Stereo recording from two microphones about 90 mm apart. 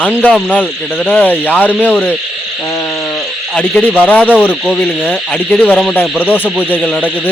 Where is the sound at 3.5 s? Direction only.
10° left (ahead or behind).